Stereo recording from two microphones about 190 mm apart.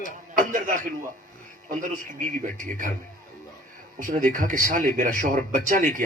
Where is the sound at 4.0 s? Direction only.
45° right (ahead or behind).